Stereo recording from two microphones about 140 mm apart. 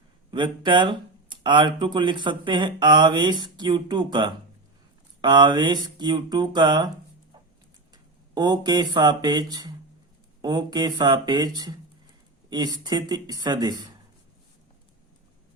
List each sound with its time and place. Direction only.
0.3 s speech: 35° right (ahead or behind)
8.4 s speech: 30° right (ahead or behind)